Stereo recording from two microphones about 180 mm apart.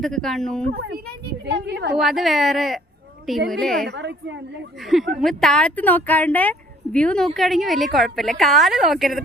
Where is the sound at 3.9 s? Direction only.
75° right (ahead or behind).